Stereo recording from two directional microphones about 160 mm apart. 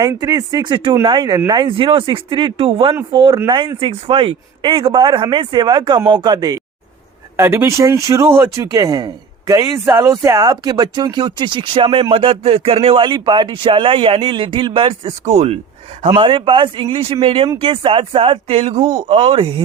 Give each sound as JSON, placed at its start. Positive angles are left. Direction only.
{"t": 0.0, "sound": "speech", "side_deg": -20}
{"t": 15.2, "sound": "speech", "side_deg": -45}
{"t": 16.0, "sound": "speech", "side_deg": -30}